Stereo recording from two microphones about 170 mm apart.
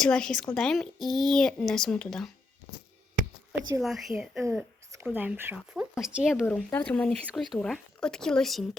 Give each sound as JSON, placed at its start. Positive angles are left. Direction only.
{"t": 0.0, "sound": "speech", "side_deg": 5}
{"t": 3.8, "sound": "speech", "side_deg": 0}
{"t": 4.4, "sound": "a sound", "side_deg": -15}
{"t": 5.0, "sound": "speech", "side_deg": -10}
{"t": 6.7, "sound": "speech", "side_deg": 10}